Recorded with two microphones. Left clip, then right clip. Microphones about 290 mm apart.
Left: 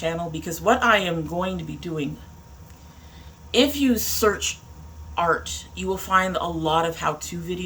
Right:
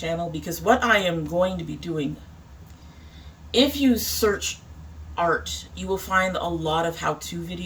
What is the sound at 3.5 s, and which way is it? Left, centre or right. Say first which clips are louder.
Speech: even; centre.